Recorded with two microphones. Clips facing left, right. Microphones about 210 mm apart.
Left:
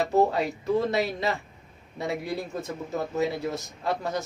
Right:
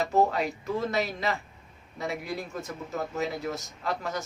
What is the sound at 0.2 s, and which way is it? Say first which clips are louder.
A man's voice: left 1 dB; 30° left (ahead or behind).